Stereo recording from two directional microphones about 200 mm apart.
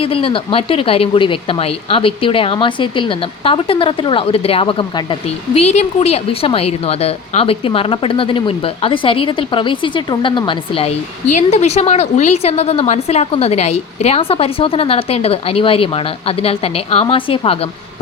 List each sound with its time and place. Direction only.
0.0 s a woman's voice: 30° left (ahead or behind)